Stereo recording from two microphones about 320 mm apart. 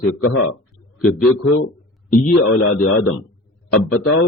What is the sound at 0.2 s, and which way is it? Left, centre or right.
A man's voice, left.